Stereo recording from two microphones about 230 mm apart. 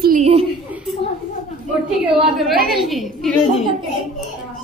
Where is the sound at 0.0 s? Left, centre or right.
Right.